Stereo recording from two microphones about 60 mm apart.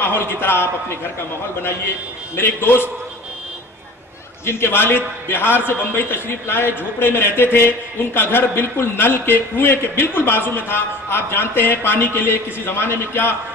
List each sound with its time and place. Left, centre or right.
0.0 s a man's voice: left
2.3 s a man's voice: left
4.5 s a man's voice: left